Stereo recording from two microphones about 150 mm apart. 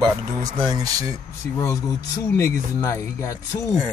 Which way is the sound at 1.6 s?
20° left (ahead or behind).